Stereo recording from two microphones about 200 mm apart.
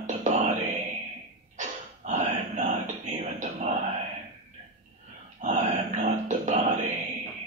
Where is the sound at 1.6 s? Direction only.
35° right (ahead or behind).